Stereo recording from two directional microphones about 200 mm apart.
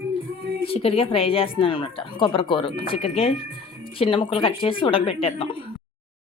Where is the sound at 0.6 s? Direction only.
30° left (ahead or behind).